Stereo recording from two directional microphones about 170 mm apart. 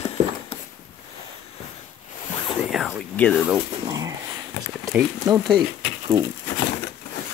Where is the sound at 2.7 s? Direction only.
Centre (ahead or behind).